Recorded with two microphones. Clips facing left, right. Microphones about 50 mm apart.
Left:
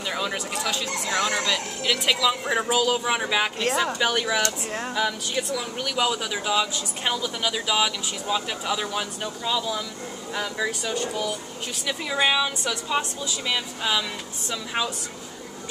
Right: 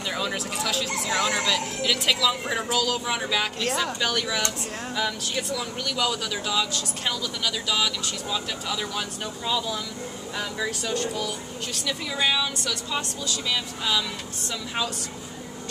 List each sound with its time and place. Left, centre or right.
0.1 s speech: centre